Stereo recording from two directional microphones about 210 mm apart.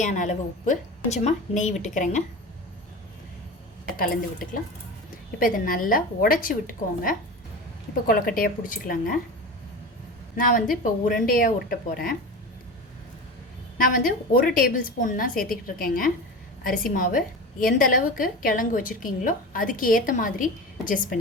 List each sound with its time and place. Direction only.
0.0 s a woman's voice: 35° left (ahead or behind)
3.9 s a woman's voice: 40° left (ahead or behind)
10.3 s a woman's voice: 40° left (ahead or behind)
13.7 s a woman's voice: 40° left (ahead or behind)